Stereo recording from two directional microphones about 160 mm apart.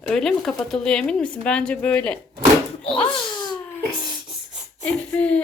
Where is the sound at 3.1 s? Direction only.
25° left (ahead or behind).